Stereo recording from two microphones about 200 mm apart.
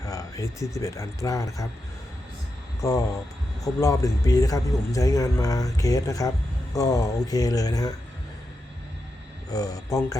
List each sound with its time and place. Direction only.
0.0 s speech: 15° left (ahead or behind)
2.8 s speech: 15° left (ahead or behind)
9.5 s speech: 20° left (ahead or behind)